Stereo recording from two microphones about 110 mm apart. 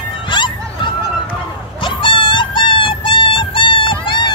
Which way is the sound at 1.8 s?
50° left (ahead or behind).